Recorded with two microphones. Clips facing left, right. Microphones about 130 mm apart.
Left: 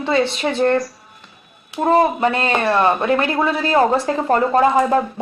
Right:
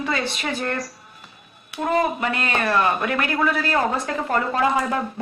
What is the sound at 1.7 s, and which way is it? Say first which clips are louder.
Speech: left 6 dB; 30° left (ahead or behind).